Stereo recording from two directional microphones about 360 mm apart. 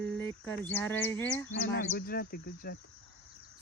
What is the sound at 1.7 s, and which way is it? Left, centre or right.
Speech, left.